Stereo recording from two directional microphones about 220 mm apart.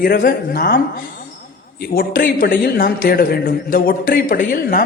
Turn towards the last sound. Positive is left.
turn(degrees=40)  # may be behind; listen again after turning